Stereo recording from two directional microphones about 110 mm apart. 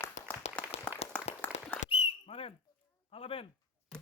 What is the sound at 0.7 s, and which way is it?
Applause, 65° left (ahead or behind).